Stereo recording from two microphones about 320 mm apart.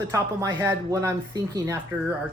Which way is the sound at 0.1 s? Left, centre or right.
Centre.